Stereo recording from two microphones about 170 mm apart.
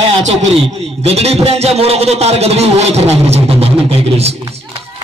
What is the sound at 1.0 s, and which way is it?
A man's voice, 35° right (ahead or behind).